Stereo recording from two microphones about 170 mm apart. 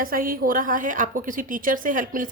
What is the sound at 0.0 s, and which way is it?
Speech, 55° right (ahead or behind).